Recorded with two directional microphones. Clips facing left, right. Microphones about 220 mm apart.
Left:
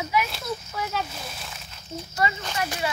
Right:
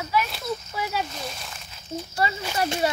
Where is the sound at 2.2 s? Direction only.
30° right (ahead or behind).